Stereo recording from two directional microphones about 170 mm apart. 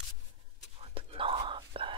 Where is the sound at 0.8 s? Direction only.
30° right (ahead or behind).